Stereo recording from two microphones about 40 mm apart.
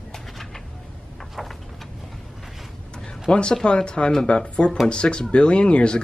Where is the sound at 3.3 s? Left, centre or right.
Left.